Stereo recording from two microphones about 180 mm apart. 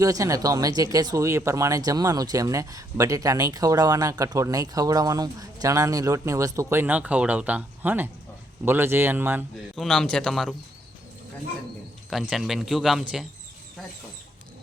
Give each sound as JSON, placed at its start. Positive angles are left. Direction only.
{"t": 0.0, "sound": "speech", "side_deg": -20}
{"t": 9.7, "sound": "a man's voice", "side_deg": 0}
{"t": 12.1, "sound": "a man's voice", "side_deg": 0}